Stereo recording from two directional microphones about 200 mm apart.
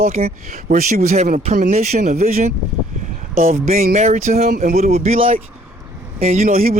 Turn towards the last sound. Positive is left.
turn(degrees=-45)  # may be behind; listen again after turning